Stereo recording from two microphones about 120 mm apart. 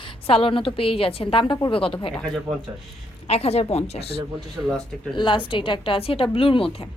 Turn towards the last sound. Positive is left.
turn(degrees=50)  # may be behind; listen again after turning